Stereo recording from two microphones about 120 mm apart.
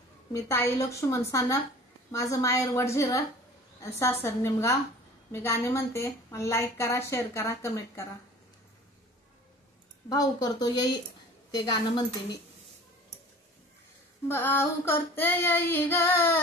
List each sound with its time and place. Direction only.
0.3 s a woman's voice: 25° left (ahead or behind)
10.0 s speech: 30° left (ahead or behind)
14.2 s female singing: 20° left (ahead or behind)